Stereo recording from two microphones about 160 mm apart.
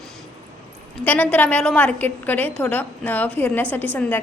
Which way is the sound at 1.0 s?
10° left (ahead or behind).